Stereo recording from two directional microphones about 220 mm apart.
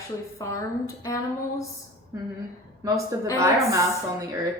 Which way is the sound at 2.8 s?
15° right (ahead or behind).